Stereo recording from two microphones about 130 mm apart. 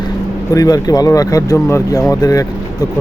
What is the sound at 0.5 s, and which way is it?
Speech, 30° left (ahead or behind).